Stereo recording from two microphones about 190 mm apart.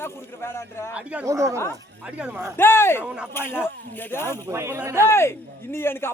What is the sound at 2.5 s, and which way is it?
Speech, 10° left (ahead or behind).